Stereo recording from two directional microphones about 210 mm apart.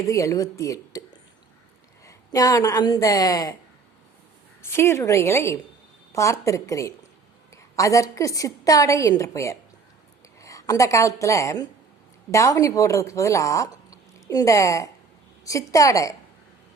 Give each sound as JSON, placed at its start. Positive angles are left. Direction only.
{"t": 0.0, "sound": "a woman's voice", "side_deg": 15}
{"t": 4.6, "sound": "a woman's voice", "side_deg": 10}